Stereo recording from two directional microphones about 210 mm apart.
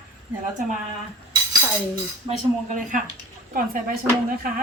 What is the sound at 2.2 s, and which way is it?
A woman's voice, 35° right (ahead or behind).